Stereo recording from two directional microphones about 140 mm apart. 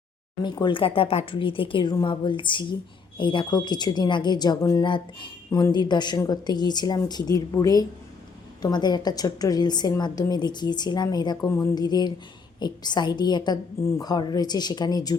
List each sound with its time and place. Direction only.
0.4 s a woman's voice: 35° left (ahead or behind)
5.5 s a woman's voice: 25° left (ahead or behind)